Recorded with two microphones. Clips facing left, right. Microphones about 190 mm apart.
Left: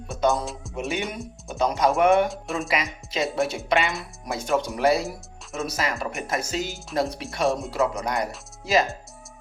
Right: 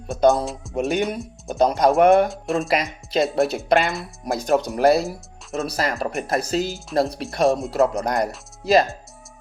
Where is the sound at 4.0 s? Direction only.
35° right (ahead or behind).